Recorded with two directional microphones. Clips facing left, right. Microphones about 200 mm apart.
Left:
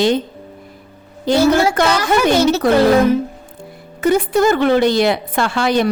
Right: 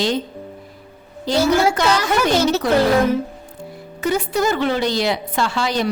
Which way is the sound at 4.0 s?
55° left (ahead or behind).